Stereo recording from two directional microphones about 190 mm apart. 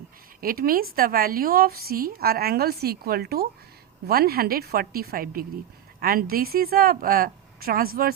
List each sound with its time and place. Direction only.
0.4 s a woman's voice: 50° right (ahead or behind)